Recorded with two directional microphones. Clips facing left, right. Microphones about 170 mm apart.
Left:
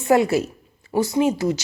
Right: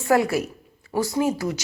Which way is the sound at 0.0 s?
20° left (ahead or behind).